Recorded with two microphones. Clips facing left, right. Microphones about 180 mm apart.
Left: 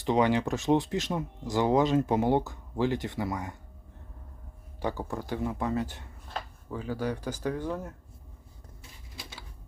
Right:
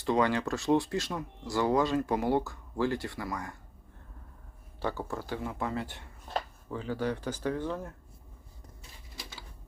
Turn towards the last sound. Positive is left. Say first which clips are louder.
# left 1 dB
turn(degrees=15)  # may be behind; listen again after turning